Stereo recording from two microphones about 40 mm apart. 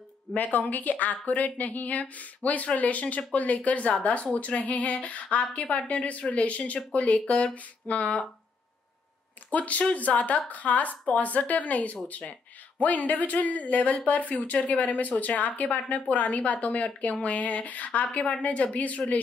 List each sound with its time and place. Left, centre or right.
0.4 s speech: left
9.5 s speech: left